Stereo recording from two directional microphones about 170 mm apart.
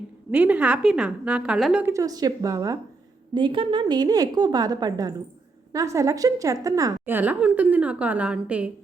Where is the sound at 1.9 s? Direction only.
20° right (ahead or behind).